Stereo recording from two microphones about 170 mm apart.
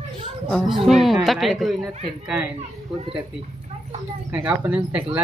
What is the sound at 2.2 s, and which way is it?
Speech, 5° right (ahead or behind).